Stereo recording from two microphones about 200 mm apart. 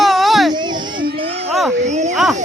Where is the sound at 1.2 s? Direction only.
30° right (ahead or behind).